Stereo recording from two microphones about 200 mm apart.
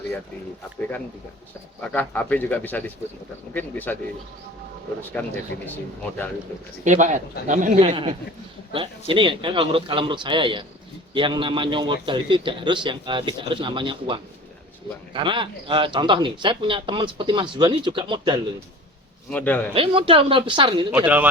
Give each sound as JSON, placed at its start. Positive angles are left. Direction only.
{"t": 1.8, "sound": "speech", "side_deg": 5}
{"t": 5.2, "sound": "speech", "side_deg": 10}
{"t": 5.5, "sound": "speech", "side_deg": 65}
{"t": 6.8, "sound": "speech", "side_deg": -40}
{"t": 19.3, "sound": "speech", "side_deg": 10}
{"t": 19.7, "sound": "speech", "side_deg": -25}
{"t": 20.9, "sound": "speech", "side_deg": -5}